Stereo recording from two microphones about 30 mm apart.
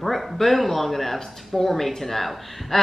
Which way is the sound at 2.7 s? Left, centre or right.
Centre.